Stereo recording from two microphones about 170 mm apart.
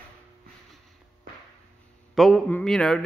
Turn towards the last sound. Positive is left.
turn(degrees=5)  # may be behind; listen again after turning